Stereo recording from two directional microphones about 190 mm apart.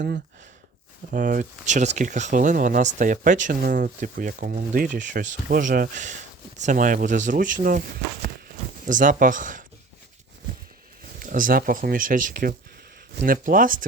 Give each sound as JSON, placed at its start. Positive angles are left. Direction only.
{"t": 1.1, "sound": "speech", "side_deg": -45}
{"t": 8.8, "sound": "speech", "side_deg": -45}
{"t": 11.2, "sound": "speech", "side_deg": -45}